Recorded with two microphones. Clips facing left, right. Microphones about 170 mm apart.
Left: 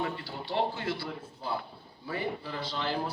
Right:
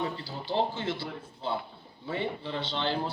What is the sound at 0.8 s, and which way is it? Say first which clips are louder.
A man's voice: right 1 dB; 25° right (ahead or behind).